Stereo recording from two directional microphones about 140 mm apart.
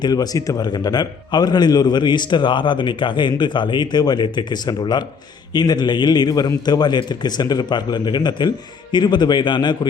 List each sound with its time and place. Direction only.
0.0 s a man's voice: 30° left (ahead or behind)